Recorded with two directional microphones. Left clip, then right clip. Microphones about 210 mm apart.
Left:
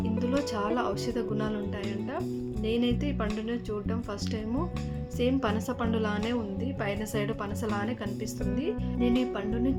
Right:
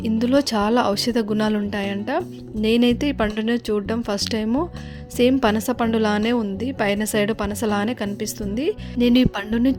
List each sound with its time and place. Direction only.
0.0 s a woman's voice: 45° right (ahead or behind)